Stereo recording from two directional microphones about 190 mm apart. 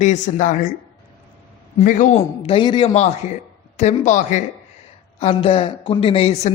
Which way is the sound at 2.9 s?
35° left (ahead or behind).